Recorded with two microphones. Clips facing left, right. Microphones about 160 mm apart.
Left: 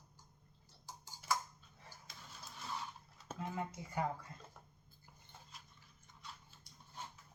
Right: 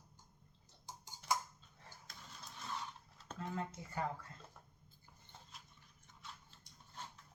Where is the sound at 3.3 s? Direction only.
15° left (ahead or behind).